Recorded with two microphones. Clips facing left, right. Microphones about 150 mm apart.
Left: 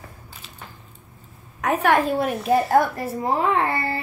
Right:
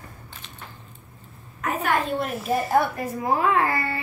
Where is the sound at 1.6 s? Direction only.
75° left (ahead or behind).